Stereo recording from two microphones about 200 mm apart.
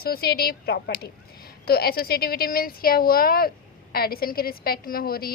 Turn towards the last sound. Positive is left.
turn(degrees=50)  # may be behind; listen again after turning